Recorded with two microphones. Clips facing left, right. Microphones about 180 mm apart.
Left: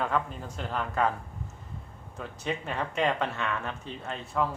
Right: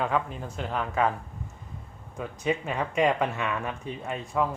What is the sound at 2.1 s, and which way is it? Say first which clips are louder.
Speech: right 5 dB; 10° right (ahead or behind).